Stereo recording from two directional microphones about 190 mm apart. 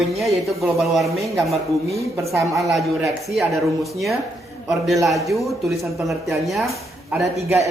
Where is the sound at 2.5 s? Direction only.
Centre (ahead or behind).